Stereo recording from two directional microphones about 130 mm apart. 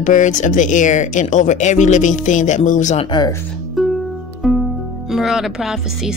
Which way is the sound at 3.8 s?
Centre (ahead or behind).